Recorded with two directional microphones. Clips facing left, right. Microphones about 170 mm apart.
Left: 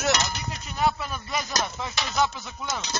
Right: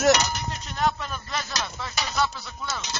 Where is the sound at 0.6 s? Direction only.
10° left (ahead or behind).